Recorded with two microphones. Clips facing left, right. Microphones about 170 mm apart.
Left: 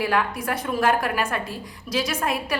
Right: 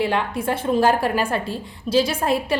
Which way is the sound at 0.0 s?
25° right (ahead or behind).